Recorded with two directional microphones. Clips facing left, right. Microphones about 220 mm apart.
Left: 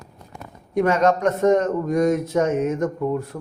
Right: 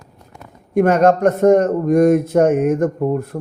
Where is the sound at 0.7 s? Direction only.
55° right (ahead or behind).